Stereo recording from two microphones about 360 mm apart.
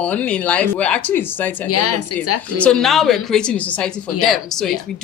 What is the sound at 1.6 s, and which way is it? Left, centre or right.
Speech, left.